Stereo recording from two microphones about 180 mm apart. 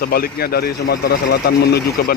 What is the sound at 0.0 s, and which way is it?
Speech, 55° left (ahead or behind).